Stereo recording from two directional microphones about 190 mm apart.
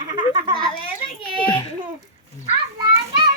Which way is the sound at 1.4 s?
25° left (ahead or behind).